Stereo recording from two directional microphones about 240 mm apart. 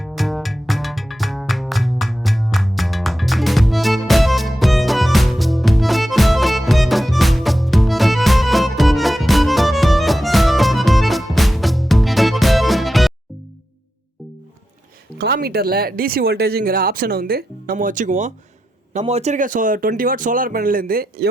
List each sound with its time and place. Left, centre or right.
0.0 s music: centre
15.2 s speech: right